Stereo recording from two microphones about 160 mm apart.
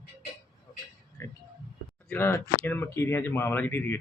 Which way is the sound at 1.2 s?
15° left (ahead or behind).